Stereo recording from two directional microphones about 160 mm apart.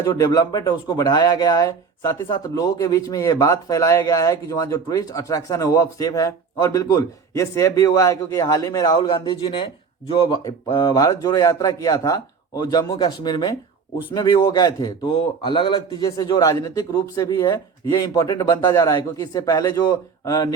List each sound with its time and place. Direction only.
0.0 s speech: 20° left (ahead or behind)